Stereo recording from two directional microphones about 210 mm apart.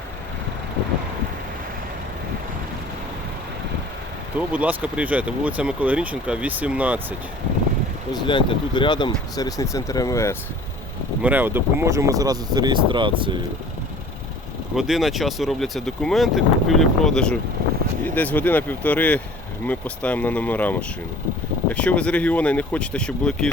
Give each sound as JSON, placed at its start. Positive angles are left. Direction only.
{"t": 4.4, "sound": "speech", "side_deg": -5}
{"t": 8.1, "sound": "speech", "side_deg": 25}
{"t": 11.2, "sound": "speech", "side_deg": -10}
{"t": 14.8, "sound": "speech", "side_deg": 0}